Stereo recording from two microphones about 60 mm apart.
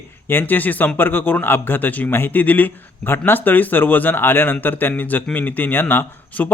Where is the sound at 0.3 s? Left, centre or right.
Left.